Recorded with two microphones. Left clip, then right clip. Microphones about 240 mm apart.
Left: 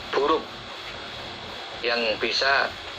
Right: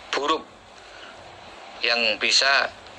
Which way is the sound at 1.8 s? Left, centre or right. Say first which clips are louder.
Right 3 dB; right.